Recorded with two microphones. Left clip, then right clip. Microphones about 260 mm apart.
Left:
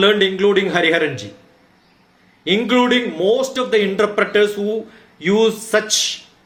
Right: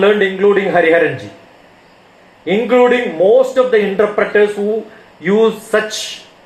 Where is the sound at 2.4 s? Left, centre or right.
Left.